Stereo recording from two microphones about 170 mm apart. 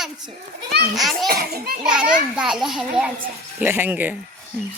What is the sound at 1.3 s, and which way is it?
Speech, 65° right (ahead or behind).